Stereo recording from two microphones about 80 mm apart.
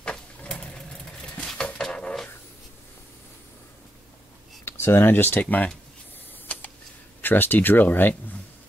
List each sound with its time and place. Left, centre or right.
0.0 s sewing machine: centre
1.4 s dog: centre
4.6 s speech: left
6.4 s a sound: left
7.2 s speech: left